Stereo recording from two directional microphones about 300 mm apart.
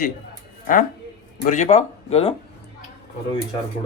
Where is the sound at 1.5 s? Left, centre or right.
Left.